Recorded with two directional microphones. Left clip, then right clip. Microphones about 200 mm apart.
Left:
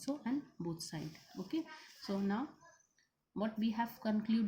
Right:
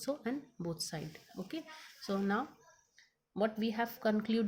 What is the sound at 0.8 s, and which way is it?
Speech, 40° right (ahead or behind).